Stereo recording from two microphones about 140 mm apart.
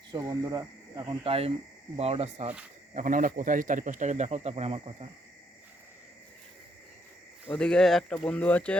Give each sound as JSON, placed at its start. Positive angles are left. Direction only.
{"t": 0.2, "sound": "speech", "side_deg": -25}
{"t": 1.2, "sound": "speech", "side_deg": -45}
{"t": 2.9, "sound": "speech", "side_deg": -75}
{"t": 7.4, "sound": "speech", "side_deg": 10}